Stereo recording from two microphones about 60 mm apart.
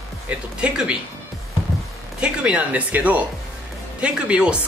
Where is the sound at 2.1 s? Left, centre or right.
Centre.